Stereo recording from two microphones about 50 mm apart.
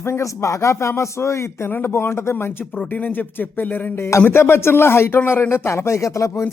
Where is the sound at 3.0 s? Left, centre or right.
Left.